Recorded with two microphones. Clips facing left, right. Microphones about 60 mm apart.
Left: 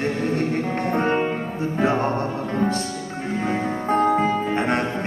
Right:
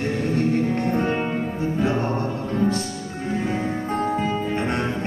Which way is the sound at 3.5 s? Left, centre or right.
Left.